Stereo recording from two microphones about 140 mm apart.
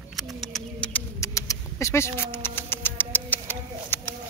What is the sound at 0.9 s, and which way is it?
Bird, 20° left (ahead or behind).